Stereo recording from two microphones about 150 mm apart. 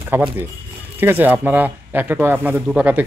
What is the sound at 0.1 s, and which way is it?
Speech, 15° right (ahead or behind).